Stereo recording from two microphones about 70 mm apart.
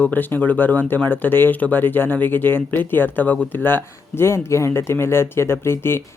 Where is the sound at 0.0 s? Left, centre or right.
Left.